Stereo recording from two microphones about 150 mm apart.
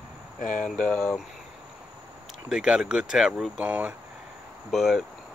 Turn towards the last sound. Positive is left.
turn(degrees=0)  # may be behind; listen again after turning